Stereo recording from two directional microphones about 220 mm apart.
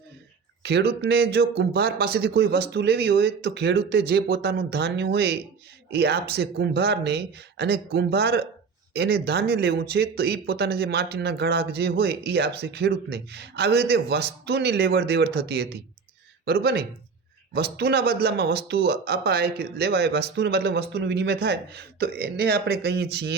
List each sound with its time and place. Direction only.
0.6 s speech: 50° right (ahead or behind)